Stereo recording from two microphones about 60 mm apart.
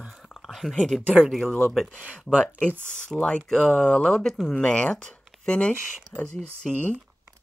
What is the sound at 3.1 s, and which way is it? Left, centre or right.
Speech, centre.